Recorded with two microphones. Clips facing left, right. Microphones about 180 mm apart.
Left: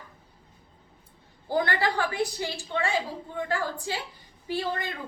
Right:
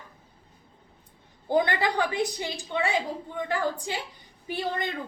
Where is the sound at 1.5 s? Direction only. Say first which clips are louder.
Right 2 dB; 20° right (ahead or behind).